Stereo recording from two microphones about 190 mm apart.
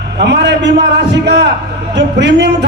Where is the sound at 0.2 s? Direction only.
65° right (ahead or behind).